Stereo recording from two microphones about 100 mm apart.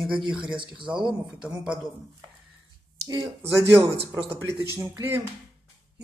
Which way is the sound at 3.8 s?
30° right (ahead or behind).